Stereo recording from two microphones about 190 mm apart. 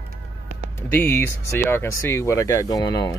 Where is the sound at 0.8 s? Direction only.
10° left (ahead or behind).